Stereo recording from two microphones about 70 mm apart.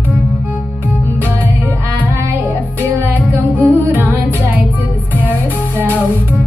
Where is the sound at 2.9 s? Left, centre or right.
Right.